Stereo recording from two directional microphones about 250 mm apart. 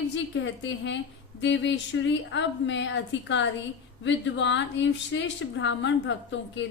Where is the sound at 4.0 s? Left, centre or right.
Left.